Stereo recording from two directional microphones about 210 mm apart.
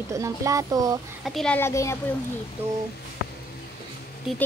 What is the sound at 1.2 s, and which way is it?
Speech, centre (ahead or behind).